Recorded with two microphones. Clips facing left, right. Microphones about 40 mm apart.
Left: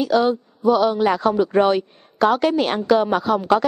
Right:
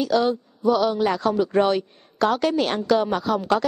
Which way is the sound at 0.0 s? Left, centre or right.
Centre.